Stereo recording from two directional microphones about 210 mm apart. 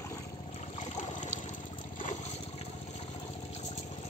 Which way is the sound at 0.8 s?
35° left (ahead or behind).